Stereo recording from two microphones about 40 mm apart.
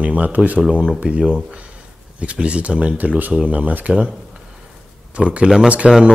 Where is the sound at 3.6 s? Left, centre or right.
Right.